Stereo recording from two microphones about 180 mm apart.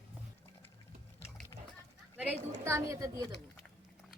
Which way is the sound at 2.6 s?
15° right (ahead or behind).